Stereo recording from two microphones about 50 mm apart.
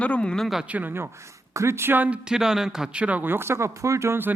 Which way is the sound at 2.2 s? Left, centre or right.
Centre.